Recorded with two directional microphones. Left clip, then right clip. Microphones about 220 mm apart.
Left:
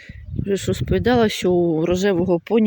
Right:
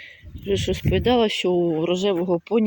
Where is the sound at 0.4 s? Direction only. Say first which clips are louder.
Left 1 dB; 10° left (ahead or behind).